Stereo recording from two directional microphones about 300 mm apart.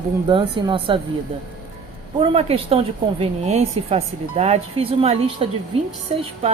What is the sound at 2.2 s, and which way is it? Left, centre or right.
A woman's voice, centre.